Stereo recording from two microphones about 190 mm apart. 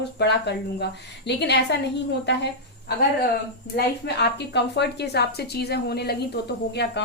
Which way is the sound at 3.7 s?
60° left (ahead or behind).